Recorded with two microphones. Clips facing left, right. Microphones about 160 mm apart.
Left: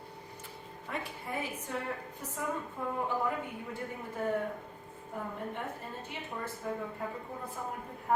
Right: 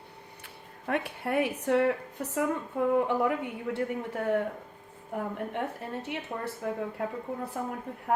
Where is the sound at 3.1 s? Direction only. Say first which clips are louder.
Right 6 dB; 75° right (ahead or behind).